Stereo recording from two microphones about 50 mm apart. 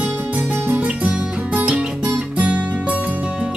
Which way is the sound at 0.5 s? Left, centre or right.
Right.